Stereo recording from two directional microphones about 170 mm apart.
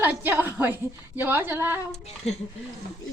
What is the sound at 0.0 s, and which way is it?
A woman's voice, 10° right (ahead or behind).